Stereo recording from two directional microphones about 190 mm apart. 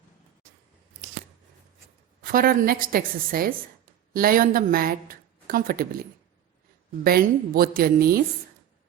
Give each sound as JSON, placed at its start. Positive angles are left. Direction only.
{"t": 2.2, "sound": "a woman's voice", "side_deg": -50}
{"t": 7.0, "sound": "a woman's voice", "side_deg": -50}